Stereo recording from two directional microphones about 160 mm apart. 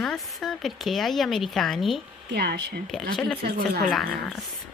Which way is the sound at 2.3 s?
90° right.